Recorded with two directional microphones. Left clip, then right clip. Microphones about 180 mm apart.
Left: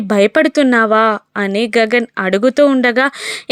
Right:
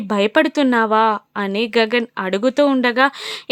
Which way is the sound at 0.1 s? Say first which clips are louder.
Left 4 dB; 15° left (ahead or behind).